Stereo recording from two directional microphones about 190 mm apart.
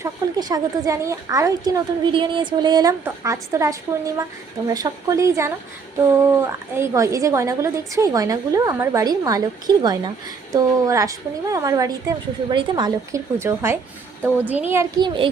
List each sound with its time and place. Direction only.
0.0 s a woman's voice: 20° right (ahead or behind)